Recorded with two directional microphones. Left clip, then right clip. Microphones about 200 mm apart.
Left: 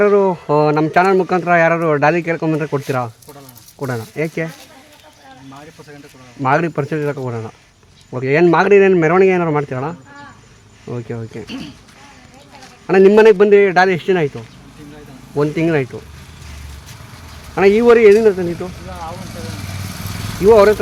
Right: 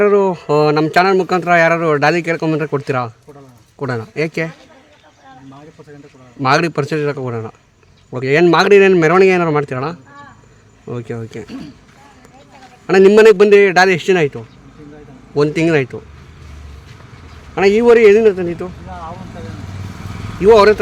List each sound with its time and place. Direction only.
0.0 s speech: 10° right (ahead or behind)
6.4 s speech: 20° right (ahead or behind)
12.9 s speech: 15° right (ahead or behind)
17.5 s speech: 5° right (ahead or behind)
19.7 s vehicle: 40° left (ahead or behind)
20.5 s speech: 15° right (ahead or behind)